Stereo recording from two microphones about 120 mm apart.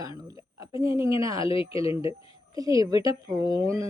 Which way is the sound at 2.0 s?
30° right (ahead or behind).